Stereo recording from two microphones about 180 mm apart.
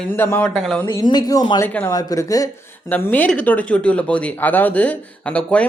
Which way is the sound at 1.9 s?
20° left (ahead or behind).